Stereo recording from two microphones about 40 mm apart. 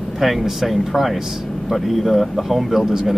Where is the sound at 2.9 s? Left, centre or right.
Centre.